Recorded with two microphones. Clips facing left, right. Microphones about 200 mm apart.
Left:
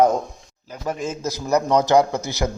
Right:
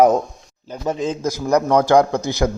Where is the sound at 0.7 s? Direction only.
25° right (ahead or behind).